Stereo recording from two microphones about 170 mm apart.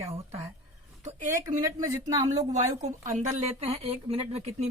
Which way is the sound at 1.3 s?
20° right (ahead or behind).